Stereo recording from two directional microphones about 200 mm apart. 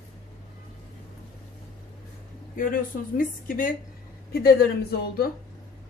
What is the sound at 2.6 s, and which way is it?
A woman's voice, 45° left (ahead or behind).